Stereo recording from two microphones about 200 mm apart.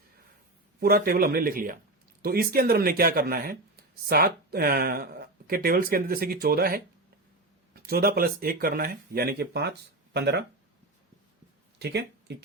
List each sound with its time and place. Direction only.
0.8 s speech: 50° right (ahead or behind)
11.8 s speech: 55° right (ahead or behind)